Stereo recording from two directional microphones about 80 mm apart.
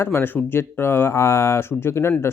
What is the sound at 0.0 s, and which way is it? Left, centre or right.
Speech, left.